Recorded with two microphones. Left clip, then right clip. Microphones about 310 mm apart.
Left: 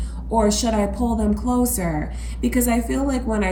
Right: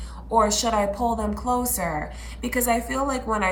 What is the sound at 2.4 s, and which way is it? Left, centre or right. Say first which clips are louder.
Speech: left 2 dB; right.